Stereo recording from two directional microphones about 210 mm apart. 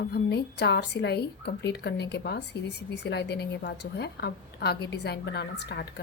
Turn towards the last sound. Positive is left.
turn(degrees=50)  # may be behind; listen again after turning